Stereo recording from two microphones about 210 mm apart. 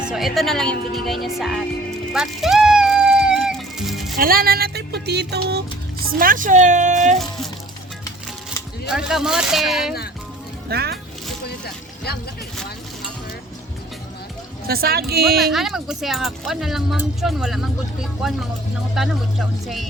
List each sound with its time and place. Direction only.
0.0 s music: centre (ahead or behind)
0.3 s speech: centre (ahead or behind)
2.1 s music: centre (ahead or behind)
4.2 s speech: 45° right (ahead or behind)
8.9 s speech: centre (ahead or behind)
10.7 s speech: 50° right (ahead or behind)
11.4 s vehicle: 50° left (ahead or behind)
14.7 s speech: 45° right (ahead or behind)
15.4 s speech: centre (ahead or behind)